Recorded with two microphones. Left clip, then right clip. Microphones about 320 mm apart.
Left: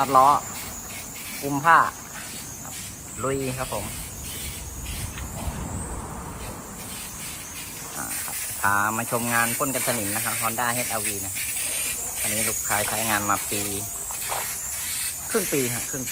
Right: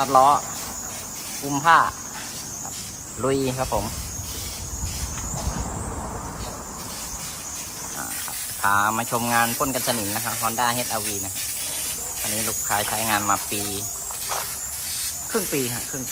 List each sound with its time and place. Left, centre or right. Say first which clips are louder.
0.0 s speech: right 1 dB; centre
1.5 s speech: right 1 dB; centre
3.2 s speech: right 4 dB; centre
8.6 s speech: right 2 dB; centre
12.2 s speech: even; centre
15.3 s speech: left 1 dB; centre